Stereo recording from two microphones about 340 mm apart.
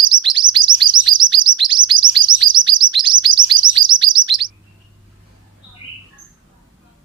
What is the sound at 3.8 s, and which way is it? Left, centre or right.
Chirp, right.